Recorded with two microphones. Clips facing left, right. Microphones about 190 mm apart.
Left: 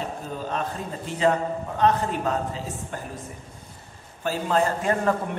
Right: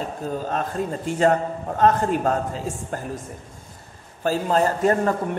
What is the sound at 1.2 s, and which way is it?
A man's voice, 45° right (ahead or behind).